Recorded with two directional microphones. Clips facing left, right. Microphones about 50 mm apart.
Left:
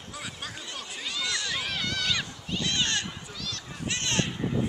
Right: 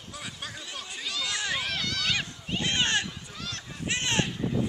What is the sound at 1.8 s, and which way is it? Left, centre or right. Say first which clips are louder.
Run: left 1 dB; centre.